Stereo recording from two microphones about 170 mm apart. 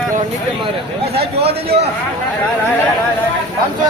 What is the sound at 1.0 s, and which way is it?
Speech, 35° right (ahead or behind).